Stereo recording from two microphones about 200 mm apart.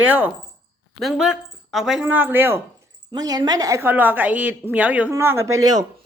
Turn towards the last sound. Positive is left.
turn(degrees=-20)  # may be behind; listen again after turning